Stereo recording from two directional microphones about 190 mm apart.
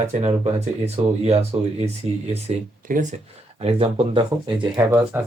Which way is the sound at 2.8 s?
45° right (ahead or behind).